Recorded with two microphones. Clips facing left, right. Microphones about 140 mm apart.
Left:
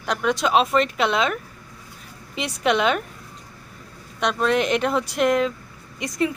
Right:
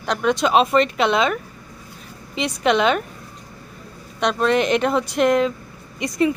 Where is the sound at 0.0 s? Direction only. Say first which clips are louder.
Right 3 dB; 5° left (ahead or behind).